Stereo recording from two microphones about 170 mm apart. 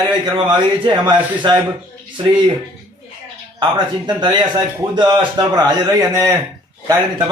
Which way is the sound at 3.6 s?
25° right (ahead or behind).